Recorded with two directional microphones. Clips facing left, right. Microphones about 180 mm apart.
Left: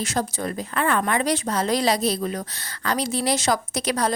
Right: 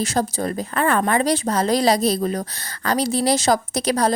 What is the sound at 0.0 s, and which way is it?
A woman's voice, 35° right (ahead or behind).